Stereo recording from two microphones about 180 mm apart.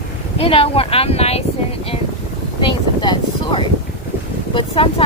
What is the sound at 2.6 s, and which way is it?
Speech, 25° left (ahead or behind).